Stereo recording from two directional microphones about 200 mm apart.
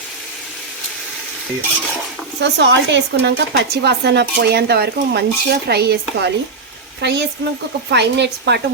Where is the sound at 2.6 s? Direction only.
60° right (ahead or behind).